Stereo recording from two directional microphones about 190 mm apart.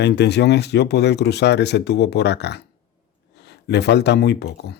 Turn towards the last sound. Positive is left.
turn(degrees=60)  # may be behind; listen again after turning